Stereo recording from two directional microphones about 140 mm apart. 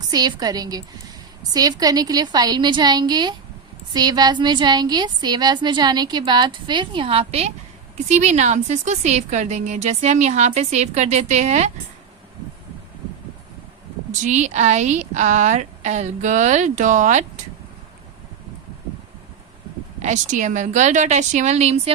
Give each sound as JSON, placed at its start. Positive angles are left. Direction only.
{"t": 0.1, "sound": "a woman's voice", "side_deg": -30}
{"t": 14.1, "sound": "speech", "side_deg": -60}
{"t": 20.0, "sound": "speech", "side_deg": -60}